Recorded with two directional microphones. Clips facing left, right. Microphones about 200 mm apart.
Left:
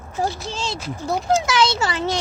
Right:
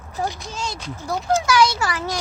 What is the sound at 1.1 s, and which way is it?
A child's voice, 25° left (ahead or behind).